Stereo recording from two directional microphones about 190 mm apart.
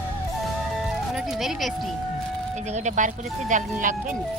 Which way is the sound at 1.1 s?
Centre (ahead or behind).